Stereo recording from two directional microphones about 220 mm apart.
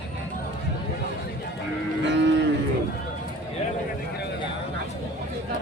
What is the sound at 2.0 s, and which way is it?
Cattle, 55° right (ahead or behind).